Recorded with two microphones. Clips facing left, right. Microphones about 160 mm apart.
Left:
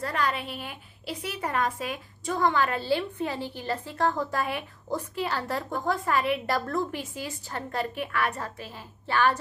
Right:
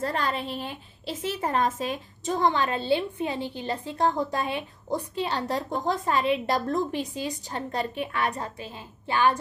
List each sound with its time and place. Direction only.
0.0 s a woman's voice: 30° right (ahead or behind)